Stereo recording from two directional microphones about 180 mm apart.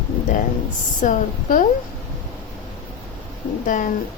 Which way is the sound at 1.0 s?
45° left (ahead or behind).